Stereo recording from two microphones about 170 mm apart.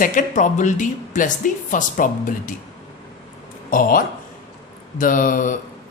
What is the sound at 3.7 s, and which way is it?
Speech, 55° left (ahead or behind).